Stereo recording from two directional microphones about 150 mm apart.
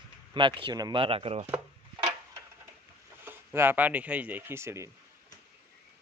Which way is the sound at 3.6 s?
15° right (ahead or behind).